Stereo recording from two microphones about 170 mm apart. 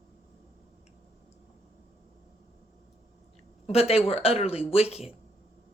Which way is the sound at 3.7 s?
35° left (ahead or behind).